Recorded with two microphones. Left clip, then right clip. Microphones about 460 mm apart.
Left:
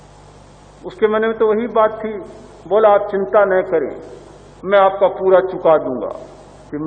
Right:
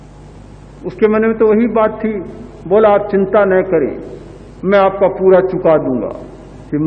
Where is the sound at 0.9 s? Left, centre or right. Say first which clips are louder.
Right 3 dB; centre.